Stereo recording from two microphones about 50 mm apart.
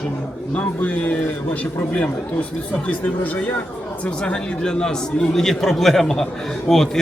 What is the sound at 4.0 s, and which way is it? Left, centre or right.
A man's voice, left.